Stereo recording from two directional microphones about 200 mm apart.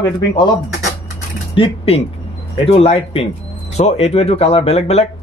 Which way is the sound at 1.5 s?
30° left (ahead or behind).